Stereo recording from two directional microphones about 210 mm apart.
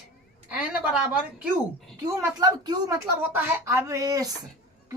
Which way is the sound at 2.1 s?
20° right (ahead or behind).